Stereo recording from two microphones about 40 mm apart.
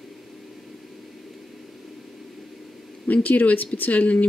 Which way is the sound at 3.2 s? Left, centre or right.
Left.